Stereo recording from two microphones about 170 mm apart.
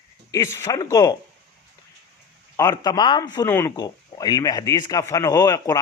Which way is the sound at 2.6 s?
20° left (ahead or behind).